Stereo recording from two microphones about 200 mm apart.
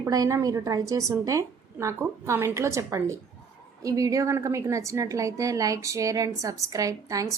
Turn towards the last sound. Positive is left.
turn(degrees=-15)  # may be behind; listen again after turning